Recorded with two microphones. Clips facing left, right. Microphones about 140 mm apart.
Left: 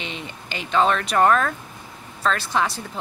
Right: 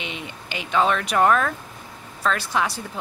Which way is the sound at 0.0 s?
10° right (ahead or behind).